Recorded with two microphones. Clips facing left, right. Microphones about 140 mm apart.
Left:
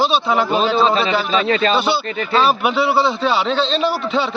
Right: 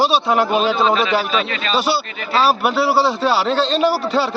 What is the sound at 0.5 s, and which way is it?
Speech, 45° right (ahead or behind).